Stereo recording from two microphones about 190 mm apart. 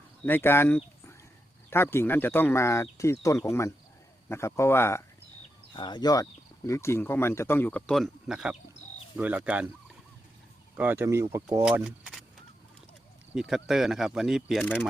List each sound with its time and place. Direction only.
0.3 s speech: 10° left (ahead or behind)
5.7 s speech: 25° left (ahead or behind); by 9.6 s 5° right (ahead or behind)
10.8 s speech: 10° right (ahead or behind)
11.6 s speech: 5° right (ahead or behind)
13.3 s speech: centre (ahead or behind)